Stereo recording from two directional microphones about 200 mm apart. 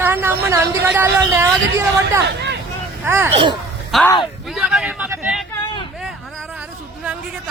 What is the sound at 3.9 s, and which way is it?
Speech, centre (ahead or behind).